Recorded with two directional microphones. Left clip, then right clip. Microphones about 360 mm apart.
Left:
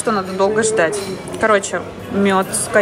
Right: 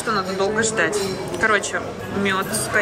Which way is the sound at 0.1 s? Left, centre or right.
Centre.